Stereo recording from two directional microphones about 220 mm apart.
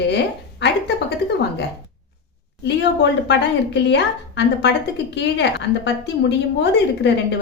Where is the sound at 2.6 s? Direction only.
50° left (ahead or behind).